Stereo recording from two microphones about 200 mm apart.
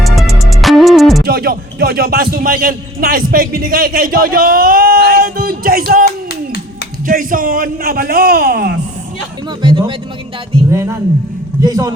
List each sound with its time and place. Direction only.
0.0 s music: centre (ahead or behind)
1.2 s a man's voice: 50° right (ahead or behind)
9.5 s speech: 25° right (ahead or behind)